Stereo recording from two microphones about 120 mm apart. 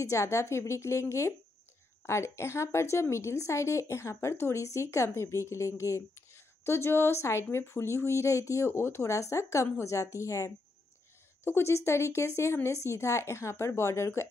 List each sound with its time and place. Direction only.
0.0 s a woman's voice: 25° left (ahead or behind)